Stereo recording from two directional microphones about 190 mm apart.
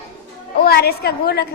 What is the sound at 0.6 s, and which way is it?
Speech, 55° left (ahead or behind).